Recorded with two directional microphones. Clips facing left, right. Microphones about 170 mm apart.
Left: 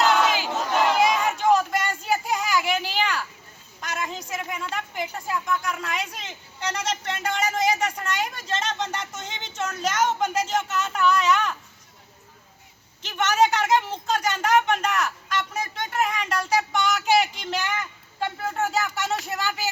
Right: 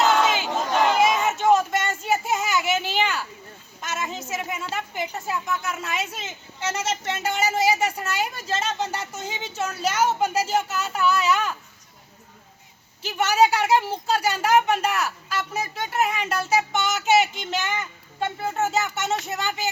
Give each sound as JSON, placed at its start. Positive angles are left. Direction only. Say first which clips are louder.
{"t": 0.0, "sound": "battle cry", "louder": "right 1 dB", "side_deg": 0}
{"t": 0.7, "sound": "a sound", "louder": "right 1 dB", "side_deg": 0}
{"t": 4.7, "sound": "a woman's voice", "louder": "right 1 dB", "side_deg": -5}
{"t": 13.0, "sound": "a woman's voice", "louder": "right 2 dB", "side_deg": -10}